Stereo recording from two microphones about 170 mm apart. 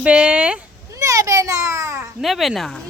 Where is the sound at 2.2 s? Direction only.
Centre (ahead or behind).